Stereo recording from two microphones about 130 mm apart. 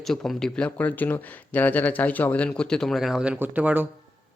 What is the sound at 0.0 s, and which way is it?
Speech, centre (ahead or behind).